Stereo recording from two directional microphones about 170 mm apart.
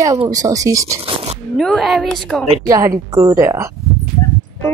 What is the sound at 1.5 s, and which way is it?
Speech, centre (ahead or behind).